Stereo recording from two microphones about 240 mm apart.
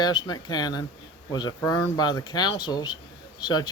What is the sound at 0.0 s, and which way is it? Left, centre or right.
Speech, centre.